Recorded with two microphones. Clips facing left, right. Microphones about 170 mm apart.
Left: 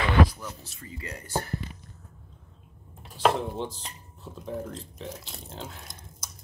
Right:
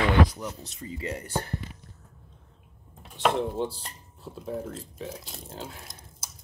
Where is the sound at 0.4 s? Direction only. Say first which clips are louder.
Right 4 dB; 20° right (ahead or behind).